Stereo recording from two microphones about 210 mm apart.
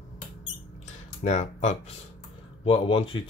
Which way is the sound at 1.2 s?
30° left (ahead or behind).